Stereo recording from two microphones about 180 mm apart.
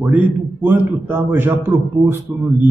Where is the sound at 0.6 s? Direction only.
10° right (ahead or behind).